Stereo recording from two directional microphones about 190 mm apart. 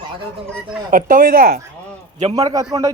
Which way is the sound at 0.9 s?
45° right (ahead or behind).